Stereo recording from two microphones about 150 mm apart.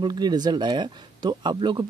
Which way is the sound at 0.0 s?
30° right (ahead or behind).